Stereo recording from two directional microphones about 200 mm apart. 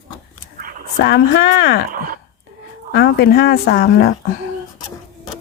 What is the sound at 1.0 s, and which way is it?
Speech, 50° left (ahead or behind).